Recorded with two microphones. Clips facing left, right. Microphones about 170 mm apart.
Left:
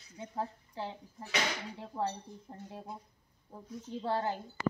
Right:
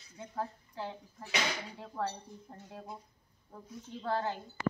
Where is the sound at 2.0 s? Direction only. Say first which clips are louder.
Left 1 dB; 25° left (ahead or behind).